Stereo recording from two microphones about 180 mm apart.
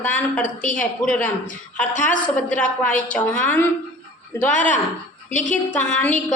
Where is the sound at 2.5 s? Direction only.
10° left (ahead or behind).